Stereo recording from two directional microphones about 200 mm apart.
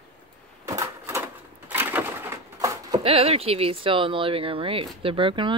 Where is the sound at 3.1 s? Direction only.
30° right (ahead or behind).